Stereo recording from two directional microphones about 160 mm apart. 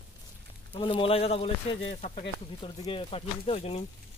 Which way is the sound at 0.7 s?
35° left (ahead or behind).